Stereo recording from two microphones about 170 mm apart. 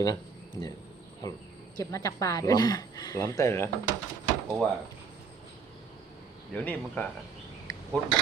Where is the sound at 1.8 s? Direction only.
20° left (ahead or behind).